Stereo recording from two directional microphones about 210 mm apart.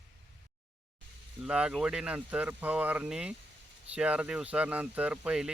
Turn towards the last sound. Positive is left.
turn(degrees=-5)  # may be behind; listen again after turning